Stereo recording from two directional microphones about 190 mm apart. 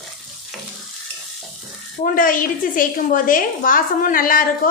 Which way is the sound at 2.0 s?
45° left (ahead or behind).